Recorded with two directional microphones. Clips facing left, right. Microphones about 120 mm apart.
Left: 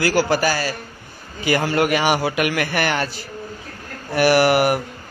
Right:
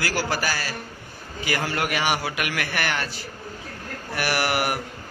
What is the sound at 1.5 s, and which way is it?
A man's voice, 25° left (ahead or behind).